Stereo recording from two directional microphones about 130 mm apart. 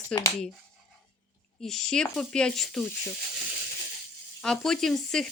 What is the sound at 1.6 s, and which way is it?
Speech, 5° left (ahead or behind).